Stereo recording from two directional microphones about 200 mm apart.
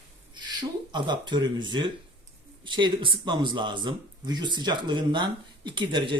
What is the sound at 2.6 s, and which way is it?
Speech, 25° right (ahead or behind).